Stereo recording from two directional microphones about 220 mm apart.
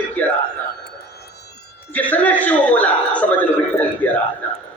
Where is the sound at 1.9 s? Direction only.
5° left (ahead or behind).